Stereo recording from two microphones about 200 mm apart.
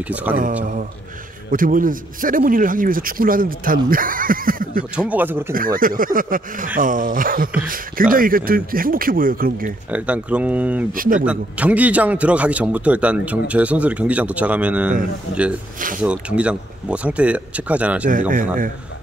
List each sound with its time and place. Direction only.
0.1 s a man's voice: 10° right (ahead or behind)
1.5 s speech: 45° right (ahead or behind)
4.9 s a man's voice: 5° right (ahead or behind)
5.5 s speech: 45° right (ahead or behind)
9.8 s a man's voice: 5° right (ahead or behind)
10.9 s speech: 45° right (ahead or behind)
11.2 s a man's voice: 5° right (ahead or behind)
16.0 s a man's voice: 5° right (ahead or behind)
18.3 s speech: 40° right (ahead or behind)